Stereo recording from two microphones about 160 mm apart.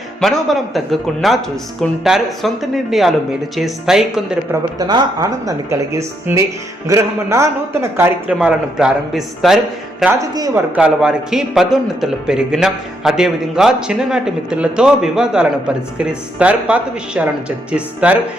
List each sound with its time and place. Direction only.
0.2 s a man's voice: centre (ahead or behind)
4.8 s a man's voice: 25° right (ahead or behind); by 9.6 s centre (ahead or behind)
10.2 s speech: 20° right (ahead or behind)
10.8 s a man's voice: 5° right (ahead or behind)